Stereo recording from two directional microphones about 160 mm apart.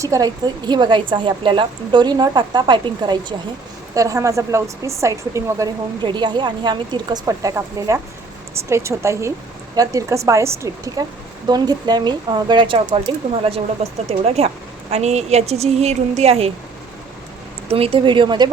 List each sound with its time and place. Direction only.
0.0 s a woman's voice: 20° right (ahead or behind); by 16.5 s 40° right (ahead or behind)
17.7 s speech: 35° right (ahead or behind)